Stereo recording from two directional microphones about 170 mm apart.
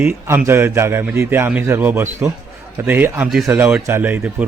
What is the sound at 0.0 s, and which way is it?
A man's voice, 10° right (ahead or behind).